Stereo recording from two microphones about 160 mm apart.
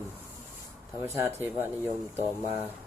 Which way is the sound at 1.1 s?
15° right (ahead or behind).